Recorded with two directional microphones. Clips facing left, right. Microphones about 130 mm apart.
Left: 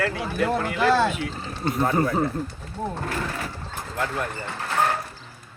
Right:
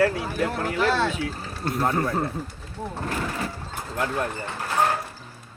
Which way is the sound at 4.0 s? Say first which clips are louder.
Right 1 dB; 15° right (ahead or behind).